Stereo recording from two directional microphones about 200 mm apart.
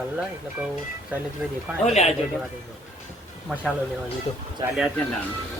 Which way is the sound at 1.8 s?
35° left (ahead or behind).